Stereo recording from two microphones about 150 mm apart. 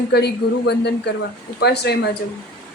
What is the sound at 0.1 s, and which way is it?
Speech, 90° left.